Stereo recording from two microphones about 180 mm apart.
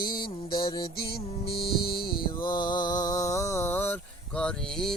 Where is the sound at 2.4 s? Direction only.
25° left (ahead or behind).